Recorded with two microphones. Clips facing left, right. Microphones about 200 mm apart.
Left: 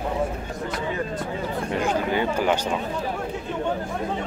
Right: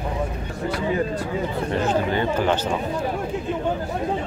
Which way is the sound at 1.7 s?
10° left (ahead or behind).